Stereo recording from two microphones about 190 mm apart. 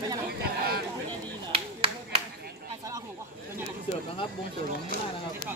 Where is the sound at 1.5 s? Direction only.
30° right (ahead or behind).